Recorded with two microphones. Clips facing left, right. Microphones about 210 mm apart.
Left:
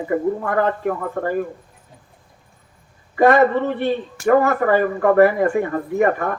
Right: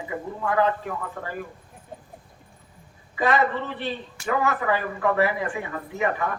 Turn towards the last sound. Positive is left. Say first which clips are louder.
# left 8 dB
turn(degrees=50)  # may be behind; listen again after turning